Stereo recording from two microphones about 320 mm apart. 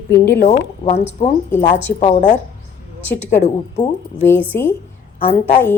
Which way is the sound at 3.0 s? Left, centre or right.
Centre.